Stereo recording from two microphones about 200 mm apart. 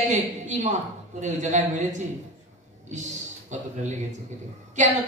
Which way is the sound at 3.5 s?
35° right (ahead or behind).